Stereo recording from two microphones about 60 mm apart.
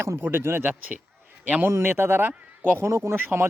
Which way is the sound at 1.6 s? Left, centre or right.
Right.